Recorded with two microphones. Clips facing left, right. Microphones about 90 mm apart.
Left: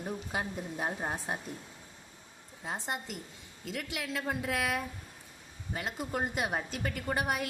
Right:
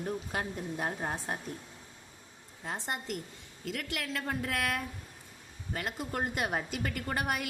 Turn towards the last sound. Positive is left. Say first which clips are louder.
# left 1 dB
turn(degrees=0)  # may be behind; listen again after turning